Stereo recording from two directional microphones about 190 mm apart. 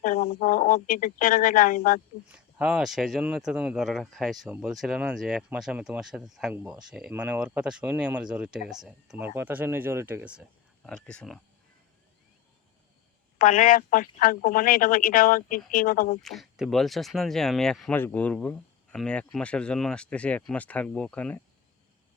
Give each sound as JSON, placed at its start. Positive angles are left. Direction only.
{"t": 0.0, "sound": "speech", "side_deg": 45}
{"t": 2.3, "sound": "speech", "side_deg": -5}
{"t": 10.8, "sound": "speech", "side_deg": 5}
{"t": 13.4, "sound": "speech", "side_deg": 45}
{"t": 16.2, "sound": "speech", "side_deg": 0}